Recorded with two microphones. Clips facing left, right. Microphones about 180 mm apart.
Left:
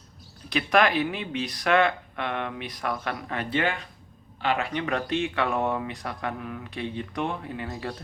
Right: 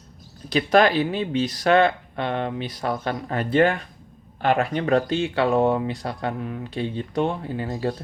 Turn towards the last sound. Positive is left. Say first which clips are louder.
# right 7 dB
turn(degrees=-30)  # may be behind; listen again after turning